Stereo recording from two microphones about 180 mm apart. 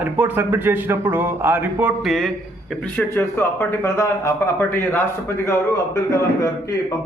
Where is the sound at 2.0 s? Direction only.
Centre (ahead or behind).